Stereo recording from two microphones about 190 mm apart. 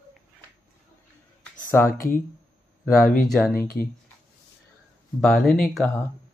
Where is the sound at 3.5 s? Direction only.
50° left (ahead or behind).